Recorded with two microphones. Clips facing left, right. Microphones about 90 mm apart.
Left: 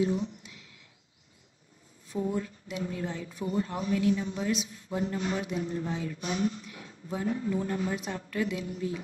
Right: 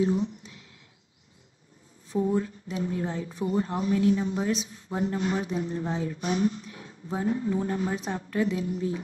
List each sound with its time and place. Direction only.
2.0 s a woman's voice: 25° right (ahead or behind)